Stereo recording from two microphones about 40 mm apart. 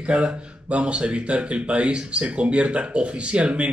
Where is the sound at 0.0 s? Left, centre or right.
Right.